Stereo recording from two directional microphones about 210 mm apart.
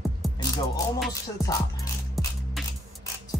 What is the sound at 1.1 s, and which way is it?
Music, 15° left (ahead or behind).